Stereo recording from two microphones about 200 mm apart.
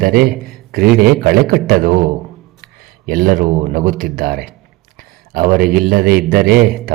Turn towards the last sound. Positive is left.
turn(degrees=-50)  # may be behind; listen again after turning